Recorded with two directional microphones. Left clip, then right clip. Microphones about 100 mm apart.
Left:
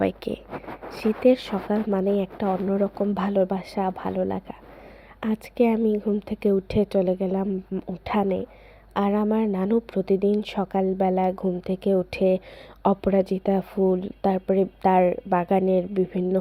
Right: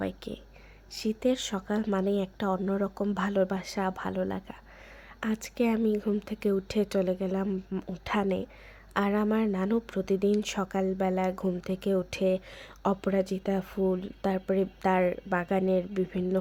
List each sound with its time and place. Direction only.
0.0 s speech: 75° left (ahead or behind)
0.9 s a woman's voice: 50° left (ahead or behind)
7.7 s speech: 20° left (ahead or behind)
8.0 s a woman's voice: 35° left (ahead or behind)